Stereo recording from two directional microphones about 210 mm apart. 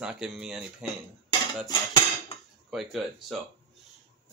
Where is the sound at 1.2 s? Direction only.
20° left (ahead or behind).